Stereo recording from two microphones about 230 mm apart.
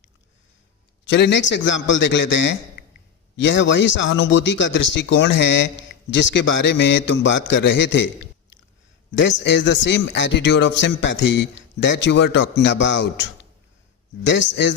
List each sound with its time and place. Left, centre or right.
1.0 s a man's voice: left